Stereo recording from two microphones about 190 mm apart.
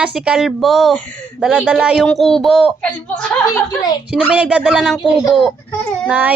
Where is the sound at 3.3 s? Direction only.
15° left (ahead or behind).